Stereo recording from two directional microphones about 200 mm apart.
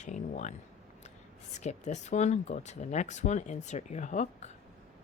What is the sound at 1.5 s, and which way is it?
Speech, 35° left (ahead or behind).